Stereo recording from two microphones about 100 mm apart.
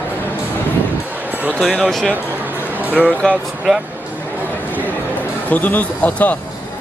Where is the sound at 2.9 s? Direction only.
15° right (ahead or behind).